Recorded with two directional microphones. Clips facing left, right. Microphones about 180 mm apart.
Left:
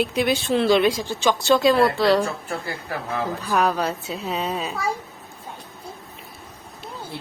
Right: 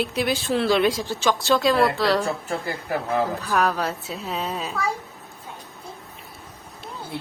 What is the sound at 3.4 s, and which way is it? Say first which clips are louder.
A woman's voice: left 1 dB; centre (ahead or behind).